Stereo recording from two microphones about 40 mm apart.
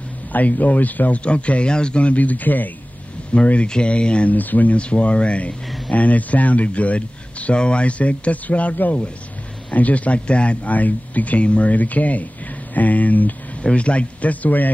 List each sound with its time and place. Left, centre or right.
0.3 s speech: left
1.2 s speech: left
3.3 s speech: left
4.3 s speech: left
4.7 s speech: left
13.6 s speech: left